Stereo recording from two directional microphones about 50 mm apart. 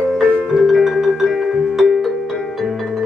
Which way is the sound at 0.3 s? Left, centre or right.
Centre.